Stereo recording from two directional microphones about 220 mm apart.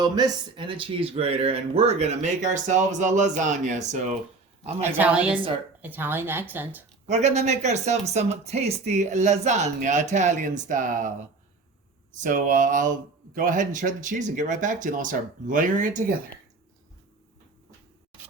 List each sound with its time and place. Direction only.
0.0 s speech: 20° right (ahead or behind)
4.8 s a woman's voice: 10° right (ahead or behind)
7.1 s speech: 30° right (ahead or behind)
12.1 s speech: 35° right (ahead or behind)